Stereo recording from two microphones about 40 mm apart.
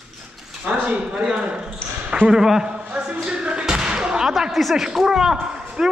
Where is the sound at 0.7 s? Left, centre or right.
Right.